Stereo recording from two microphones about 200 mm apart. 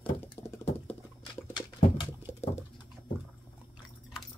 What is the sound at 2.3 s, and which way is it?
Patter, 35° left (ahead or behind).